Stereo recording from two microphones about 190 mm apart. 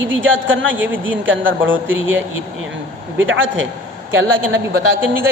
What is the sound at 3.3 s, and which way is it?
Speech, 90° right.